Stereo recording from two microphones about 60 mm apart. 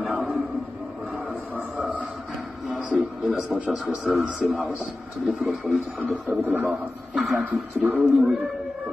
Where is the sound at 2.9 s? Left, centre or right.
Centre.